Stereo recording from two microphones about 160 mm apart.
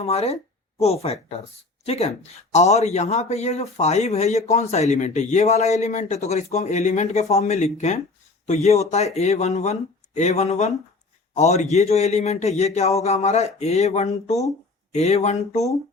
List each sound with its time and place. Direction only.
0.0 s a man's voice: 40° left (ahead or behind)